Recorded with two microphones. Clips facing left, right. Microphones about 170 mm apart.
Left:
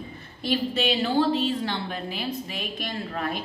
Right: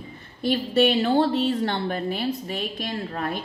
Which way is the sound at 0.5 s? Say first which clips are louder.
Right 5 dB; 50° right (ahead or behind).